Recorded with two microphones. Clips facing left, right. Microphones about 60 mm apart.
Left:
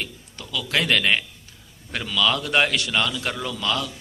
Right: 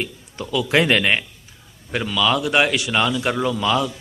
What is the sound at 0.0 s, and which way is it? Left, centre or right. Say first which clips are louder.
A man's voice: right 6 dB; right.